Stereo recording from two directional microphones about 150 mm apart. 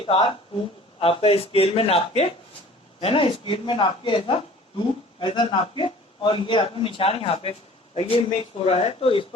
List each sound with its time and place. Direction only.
0.0 s speech: 35° left (ahead or behind)